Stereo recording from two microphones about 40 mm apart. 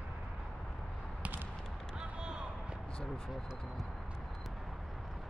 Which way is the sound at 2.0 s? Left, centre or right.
Right.